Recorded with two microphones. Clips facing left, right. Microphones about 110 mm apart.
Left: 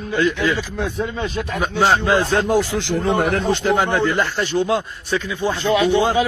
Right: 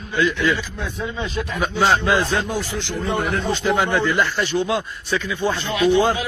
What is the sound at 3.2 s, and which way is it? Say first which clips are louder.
Speech: left 4 dB; 70° left (ahead or behind).